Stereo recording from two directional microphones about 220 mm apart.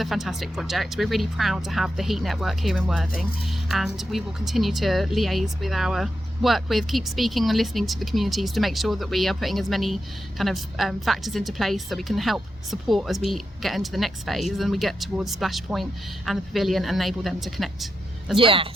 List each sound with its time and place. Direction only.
0.0 s speech: centre (ahead or behind)
18.3 s speech: 25° right (ahead or behind)